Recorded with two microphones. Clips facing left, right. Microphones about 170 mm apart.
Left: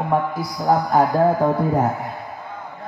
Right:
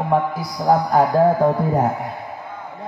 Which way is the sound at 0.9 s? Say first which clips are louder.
Right 1 dB; 10° right (ahead or behind).